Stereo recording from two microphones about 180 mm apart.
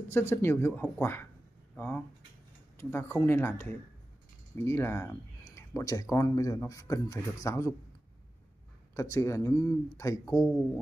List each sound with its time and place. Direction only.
0.1 s speech: 15° left (ahead or behind)
8.9 s speech: 15° left (ahead or behind)